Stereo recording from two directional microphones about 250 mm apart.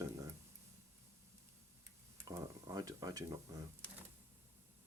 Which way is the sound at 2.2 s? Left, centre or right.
Centre.